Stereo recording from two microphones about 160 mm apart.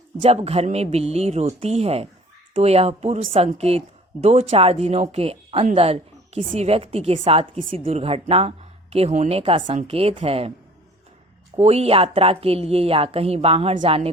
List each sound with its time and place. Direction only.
0.2 s speech: 40° right (ahead or behind)
11.5 s speech: 40° right (ahead or behind)